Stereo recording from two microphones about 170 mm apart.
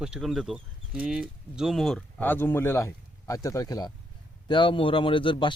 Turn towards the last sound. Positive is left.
turn(degrees=30)  # may be behind; listen again after turning